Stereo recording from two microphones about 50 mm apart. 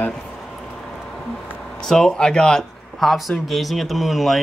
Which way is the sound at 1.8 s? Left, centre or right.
Centre.